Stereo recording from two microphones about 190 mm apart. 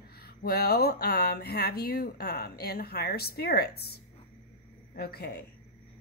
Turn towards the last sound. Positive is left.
turn(degrees=55)  # may be behind; listen again after turning